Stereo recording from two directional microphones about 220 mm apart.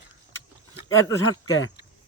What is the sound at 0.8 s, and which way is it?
Speech, 70° left (ahead or behind).